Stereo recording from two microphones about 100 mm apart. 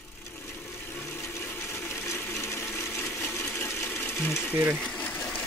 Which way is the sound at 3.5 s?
25° left (ahead or behind).